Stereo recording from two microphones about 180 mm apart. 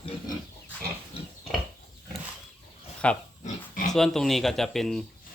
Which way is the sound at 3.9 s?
Centre (ahead or behind).